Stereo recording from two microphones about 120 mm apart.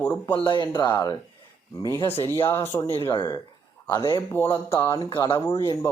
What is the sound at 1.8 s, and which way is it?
Speech, 25° left (ahead or behind).